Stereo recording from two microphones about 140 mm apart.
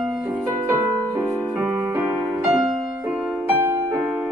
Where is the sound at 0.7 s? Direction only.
20° right (ahead or behind).